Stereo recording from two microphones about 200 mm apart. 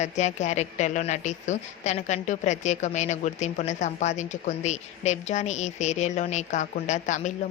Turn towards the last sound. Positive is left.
turn(degrees=35)  # may be behind; listen again after turning